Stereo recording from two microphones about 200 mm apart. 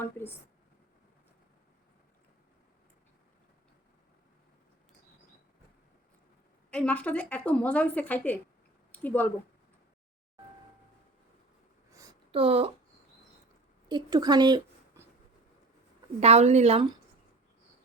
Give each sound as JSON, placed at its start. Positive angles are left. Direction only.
{"t": 0.0, "sound": "a woman's voice", "side_deg": 10}
{"t": 6.7, "sound": "a woman's voice", "side_deg": 5}
{"t": 11.9, "sound": "a sound", "side_deg": -15}
{"t": 12.3, "sound": "speech", "side_deg": -30}
{"t": 13.8, "sound": "a woman's voice", "side_deg": -20}
{"t": 16.2, "sound": "a woman's voice", "side_deg": -35}